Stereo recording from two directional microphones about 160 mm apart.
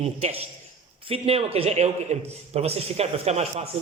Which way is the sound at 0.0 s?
40° right (ahead or behind).